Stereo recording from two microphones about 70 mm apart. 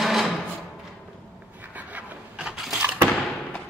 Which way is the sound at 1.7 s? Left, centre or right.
Right.